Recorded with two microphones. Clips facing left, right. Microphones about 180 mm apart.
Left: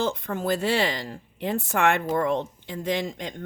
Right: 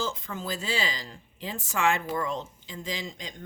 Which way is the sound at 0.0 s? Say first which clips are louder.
Left 7 dB; 60° left (ahead or behind).